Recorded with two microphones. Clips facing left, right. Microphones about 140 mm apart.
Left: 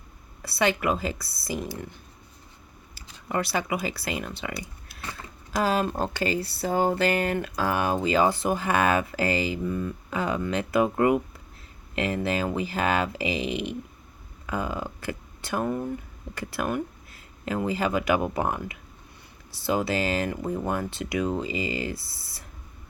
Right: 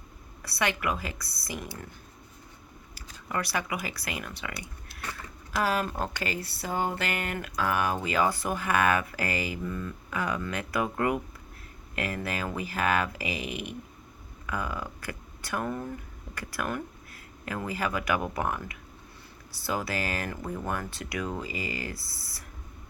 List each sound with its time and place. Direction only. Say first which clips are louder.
0.4 s speech: left 5 dB; 30° left (ahead or behind)
2.9 s speech: left 4 dB; 25° left (ahead or behind)
5.6 s speech: left 4 dB; 25° left (ahead or behind)